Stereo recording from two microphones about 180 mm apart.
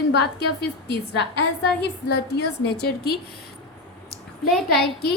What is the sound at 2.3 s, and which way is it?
Speech, 65° left (ahead or behind).